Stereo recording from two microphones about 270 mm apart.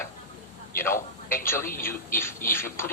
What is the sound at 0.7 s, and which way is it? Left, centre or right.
Speech, left.